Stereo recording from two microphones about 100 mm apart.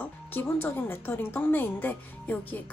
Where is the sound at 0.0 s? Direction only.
20° left (ahead or behind).